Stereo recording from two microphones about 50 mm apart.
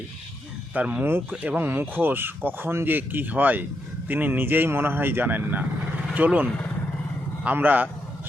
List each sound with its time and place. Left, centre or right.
0.7 s speech: right
7.5 s speech: right